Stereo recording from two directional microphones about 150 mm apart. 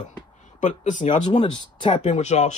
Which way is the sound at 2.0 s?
50° left (ahead or behind).